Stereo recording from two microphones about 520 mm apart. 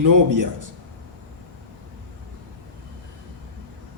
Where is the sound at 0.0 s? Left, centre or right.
Right.